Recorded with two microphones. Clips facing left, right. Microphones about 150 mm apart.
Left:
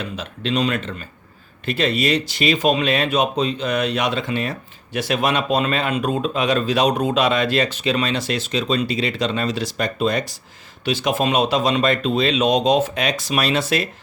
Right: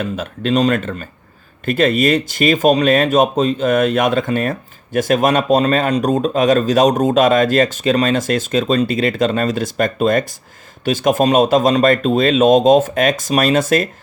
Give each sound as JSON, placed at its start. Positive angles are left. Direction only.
{"t": 0.0, "sound": "speech", "side_deg": -50}